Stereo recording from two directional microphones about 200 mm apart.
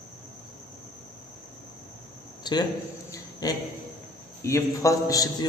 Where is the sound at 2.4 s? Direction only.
20° left (ahead or behind).